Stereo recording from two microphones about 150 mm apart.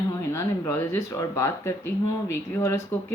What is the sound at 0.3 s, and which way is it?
Speech, 20° left (ahead or behind).